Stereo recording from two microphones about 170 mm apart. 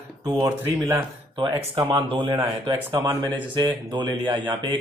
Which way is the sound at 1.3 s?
30° right (ahead or behind).